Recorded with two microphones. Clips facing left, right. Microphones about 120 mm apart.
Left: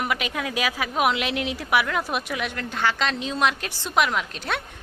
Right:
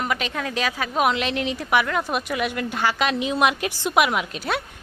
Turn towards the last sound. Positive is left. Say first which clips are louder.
# right 3 dB
turn(degrees=-5)  # may be behind; listen again after turning